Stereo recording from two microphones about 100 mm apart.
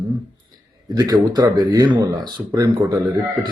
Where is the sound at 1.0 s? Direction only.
40° right (ahead or behind).